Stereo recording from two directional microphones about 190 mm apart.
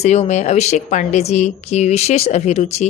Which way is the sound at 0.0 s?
35° left (ahead or behind).